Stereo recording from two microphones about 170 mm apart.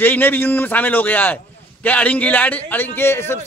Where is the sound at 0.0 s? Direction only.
10° left (ahead or behind).